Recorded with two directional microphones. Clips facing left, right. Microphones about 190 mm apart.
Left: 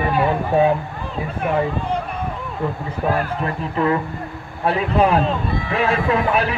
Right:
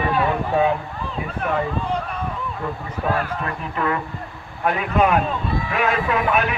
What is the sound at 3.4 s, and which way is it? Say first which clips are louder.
A man's voice: left 4 dB; 30° left (ahead or behind).